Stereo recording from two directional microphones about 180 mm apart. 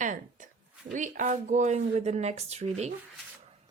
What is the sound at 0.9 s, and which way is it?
Speech, 45° right (ahead or behind).